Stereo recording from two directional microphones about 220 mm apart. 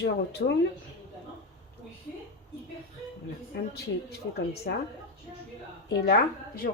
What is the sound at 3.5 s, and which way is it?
A woman's voice, 45° left (ahead or behind).